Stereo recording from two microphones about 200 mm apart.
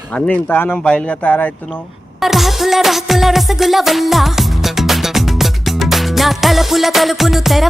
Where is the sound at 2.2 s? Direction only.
Centre (ahead or behind).